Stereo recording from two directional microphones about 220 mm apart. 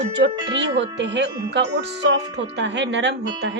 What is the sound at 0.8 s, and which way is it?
Speech, 50° right (ahead or behind).